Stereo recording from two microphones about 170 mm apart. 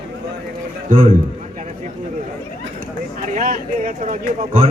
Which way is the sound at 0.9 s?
45° right (ahead or behind).